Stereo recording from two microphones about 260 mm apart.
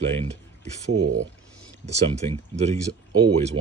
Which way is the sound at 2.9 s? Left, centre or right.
Right.